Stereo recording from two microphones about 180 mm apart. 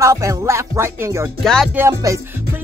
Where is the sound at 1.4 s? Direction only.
Centre (ahead or behind).